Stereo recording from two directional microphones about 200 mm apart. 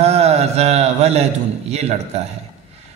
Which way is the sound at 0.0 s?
35° right (ahead or behind).